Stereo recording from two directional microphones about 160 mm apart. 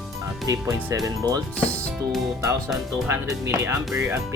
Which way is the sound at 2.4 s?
20° right (ahead or behind).